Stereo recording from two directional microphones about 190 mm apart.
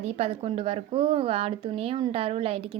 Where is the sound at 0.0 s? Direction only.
35° right (ahead or behind).